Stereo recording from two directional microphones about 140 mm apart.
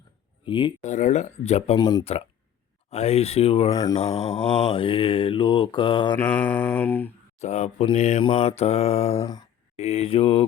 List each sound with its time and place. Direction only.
0.4 s speech: 35° left (ahead or behind)
0.8 s speech: 60° left (ahead or behind)
1.8 s mantra: 30° left (ahead or behind)
2.9 s speech: 50° left (ahead or behind)
3.7 s mantra: 25° left (ahead or behind)
3.9 s mantra: 45° left (ahead or behind)
6.1 s mantra: 10° left (ahead or behind)
7.3 s speech: 55° left (ahead or behind)
8.2 s mantra: 35° left (ahead or behind)
8.4 s speech: 50° left (ahead or behind)
9.2 s speech: 25° left (ahead or behind)
9.7 s speech: 45° left (ahead or behind)